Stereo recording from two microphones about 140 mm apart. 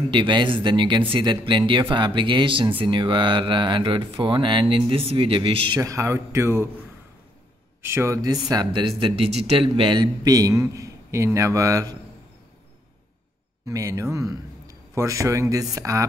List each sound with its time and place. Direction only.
0.1 s speech: 35° right (ahead or behind)
5.8 s speech: 20° right (ahead or behind)
7.8 s speech: 20° right (ahead or behind)
13.7 s a man's voice: 20° right (ahead or behind)